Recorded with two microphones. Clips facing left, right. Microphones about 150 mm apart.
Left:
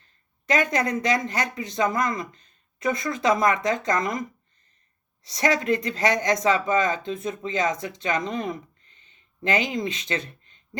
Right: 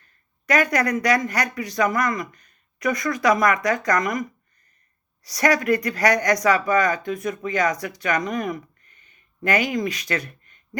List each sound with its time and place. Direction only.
0.4 s speech: 25° left (ahead or behind)